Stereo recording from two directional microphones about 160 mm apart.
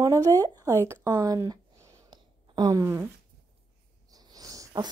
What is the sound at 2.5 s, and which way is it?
Speech, 25° right (ahead or behind).